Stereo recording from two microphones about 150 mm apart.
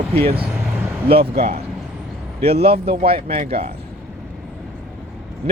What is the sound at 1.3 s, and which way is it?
Speech, 90° right.